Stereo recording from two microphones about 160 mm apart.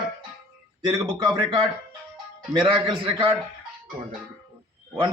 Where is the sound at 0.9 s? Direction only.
25° right (ahead or behind).